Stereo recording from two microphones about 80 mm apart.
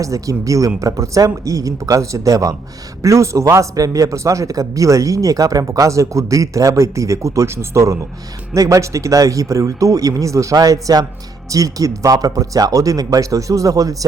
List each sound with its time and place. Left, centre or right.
0.0 s speech: right